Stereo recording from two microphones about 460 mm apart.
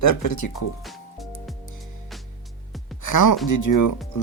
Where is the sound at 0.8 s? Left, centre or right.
Centre.